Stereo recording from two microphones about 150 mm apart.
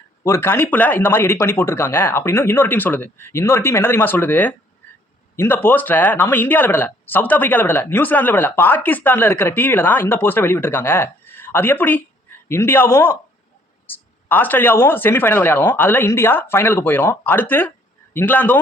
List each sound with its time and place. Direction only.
0.2 s speech: 15° left (ahead or behind)